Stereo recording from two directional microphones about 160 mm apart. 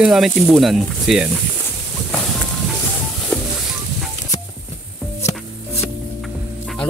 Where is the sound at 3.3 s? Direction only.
5° left (ahead or behind).